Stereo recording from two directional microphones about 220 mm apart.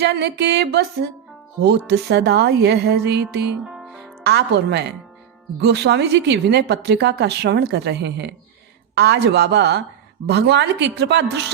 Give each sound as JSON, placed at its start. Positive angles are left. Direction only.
{"t": 0.0, "sound": "a woman's voice", "side_deg": -50}
{"t": 3.7, "sound": "music", "side_deg": 0}
{"t": 4.2, "sound": "a woman's voice", "side_deg": -50}